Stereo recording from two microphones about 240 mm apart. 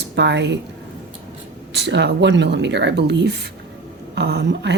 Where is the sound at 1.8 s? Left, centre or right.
Right.